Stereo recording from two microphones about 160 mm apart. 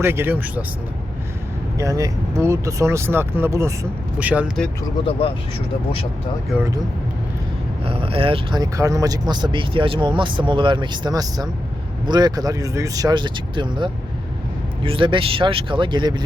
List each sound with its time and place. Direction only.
0.0 s speech: 15° right (ahead or behind)
1.8 s speech: 20° right (ahead or behind)
7.9 s speech: 35° right (ahead or behind)